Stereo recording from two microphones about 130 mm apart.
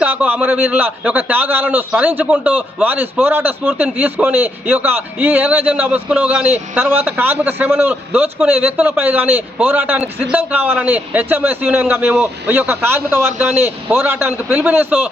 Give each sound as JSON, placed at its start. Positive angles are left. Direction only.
{"t": 0.0, "sound": "a man's voice", "side_deg": -15}